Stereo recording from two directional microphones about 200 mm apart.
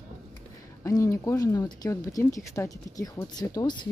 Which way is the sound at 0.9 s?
15° left (ahead or behind).